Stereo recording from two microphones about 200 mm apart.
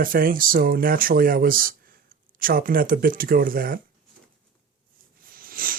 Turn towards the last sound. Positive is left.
turn(degrees=-45)  # may be behind; listen again after turning